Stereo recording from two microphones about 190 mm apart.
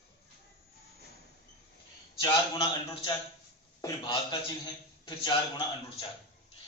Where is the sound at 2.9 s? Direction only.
25° left (ahead or behind).